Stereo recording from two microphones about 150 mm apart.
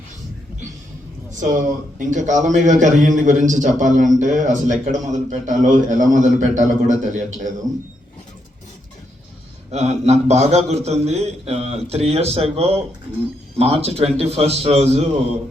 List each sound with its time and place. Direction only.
1.4 s a man's voice: 55° right (ahead or behind)
9.7 s a man's voice: 45° right (ahead or behind)